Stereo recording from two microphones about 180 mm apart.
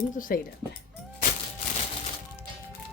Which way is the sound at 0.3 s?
55° left (ahead or behind).